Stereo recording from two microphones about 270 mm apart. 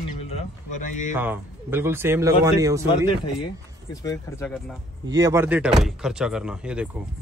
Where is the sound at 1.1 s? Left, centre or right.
Centre.